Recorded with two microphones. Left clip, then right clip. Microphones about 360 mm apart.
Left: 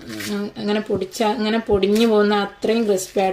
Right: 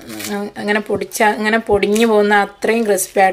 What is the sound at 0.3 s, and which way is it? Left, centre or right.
Speech, centre.